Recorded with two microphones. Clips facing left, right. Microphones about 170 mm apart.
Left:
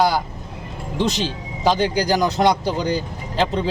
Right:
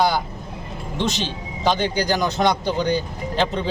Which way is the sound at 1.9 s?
35° left (ahead or behind).